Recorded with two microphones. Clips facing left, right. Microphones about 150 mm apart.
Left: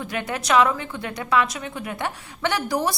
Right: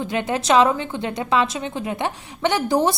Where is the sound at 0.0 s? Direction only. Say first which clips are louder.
Right 5 dB; 25° right (ahead or behind).